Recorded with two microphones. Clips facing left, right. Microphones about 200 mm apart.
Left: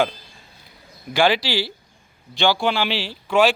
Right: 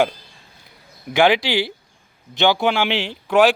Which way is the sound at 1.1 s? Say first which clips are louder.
Right 3 dB; 20° right (ahead or behind).